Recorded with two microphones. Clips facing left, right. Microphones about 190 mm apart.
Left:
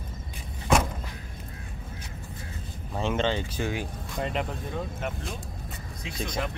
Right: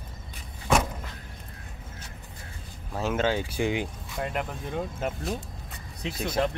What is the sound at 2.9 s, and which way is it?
Speech, 5° right (ahead or behind).